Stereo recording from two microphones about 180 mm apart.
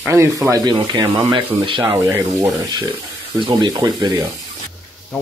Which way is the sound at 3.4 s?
25° right (ahead or behind).